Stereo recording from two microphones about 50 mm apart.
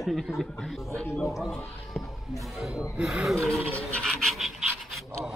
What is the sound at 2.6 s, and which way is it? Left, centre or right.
Speech, centre.